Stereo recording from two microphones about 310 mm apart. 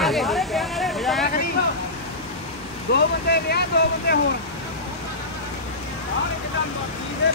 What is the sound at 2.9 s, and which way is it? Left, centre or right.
Speech, left.